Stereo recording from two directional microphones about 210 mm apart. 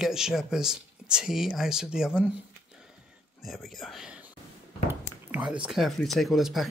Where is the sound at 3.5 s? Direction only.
Centre (ahead or behind).